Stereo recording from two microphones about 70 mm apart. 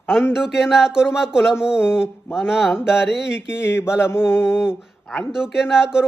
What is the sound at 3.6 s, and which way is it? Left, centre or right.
Mantra, left.